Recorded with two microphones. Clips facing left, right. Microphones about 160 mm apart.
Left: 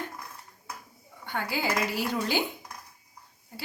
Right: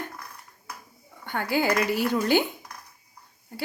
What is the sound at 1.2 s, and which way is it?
Speech, 55° right (ahead or behind).